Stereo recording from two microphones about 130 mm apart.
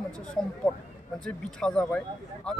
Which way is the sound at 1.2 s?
5° left (ahead or behind).